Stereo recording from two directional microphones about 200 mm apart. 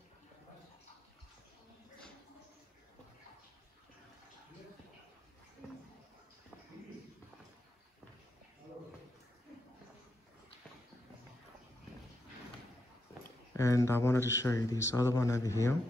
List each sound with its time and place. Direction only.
13.5 s a man's voice: 15° left (ahead or behind)